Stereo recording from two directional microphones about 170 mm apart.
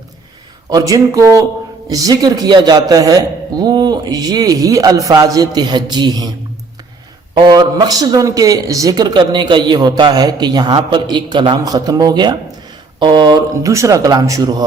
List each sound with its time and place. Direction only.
0.7 s a man's voice: 20° right (ahead or behind)
7.3 s a man's voice: 25° right (ahead or behind)